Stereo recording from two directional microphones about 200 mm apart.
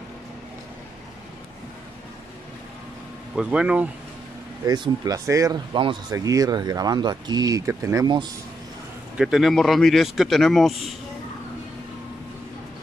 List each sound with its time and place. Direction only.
3.3 s speech: 5° right (ahead or behind)
4.6 s speech: 20° right (ahead or behind)
9.1 s speech: centre (ahead or behind)